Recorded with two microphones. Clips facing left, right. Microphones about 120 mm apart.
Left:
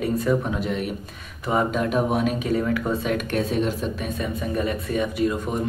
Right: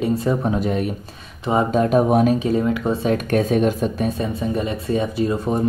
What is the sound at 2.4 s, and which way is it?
Speech, 25° right (ahead or behind).